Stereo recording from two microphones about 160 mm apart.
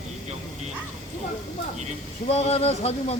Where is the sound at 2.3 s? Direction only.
40° left (ahead or behind).